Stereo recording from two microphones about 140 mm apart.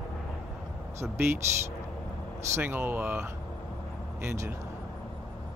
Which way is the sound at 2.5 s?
15° right (ahead or behind).